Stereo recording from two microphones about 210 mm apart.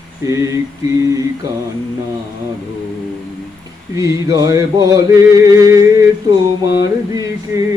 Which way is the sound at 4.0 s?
15° right (ahead or behind).